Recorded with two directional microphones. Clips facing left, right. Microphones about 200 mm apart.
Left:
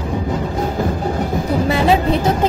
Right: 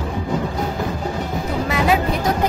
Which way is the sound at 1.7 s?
30° left (ahead or behind).